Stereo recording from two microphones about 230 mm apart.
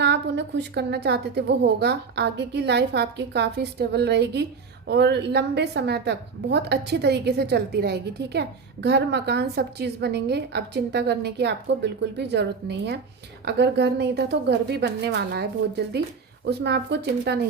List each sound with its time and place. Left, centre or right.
0.0 s a woman's voice: right